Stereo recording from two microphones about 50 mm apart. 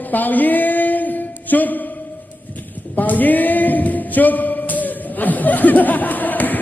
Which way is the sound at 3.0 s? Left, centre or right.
Left.